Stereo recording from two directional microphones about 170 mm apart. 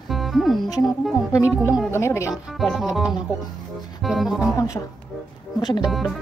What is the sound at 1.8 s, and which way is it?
Speech, 15° left (ahead or behind).